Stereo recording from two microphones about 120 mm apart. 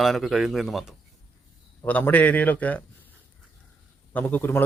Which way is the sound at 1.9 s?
15° left (ahead or behind).